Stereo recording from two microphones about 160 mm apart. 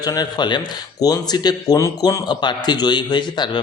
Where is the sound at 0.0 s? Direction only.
25° left (ahead or behind).